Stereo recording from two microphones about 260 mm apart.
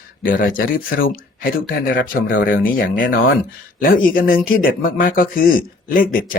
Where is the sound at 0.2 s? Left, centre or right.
Left.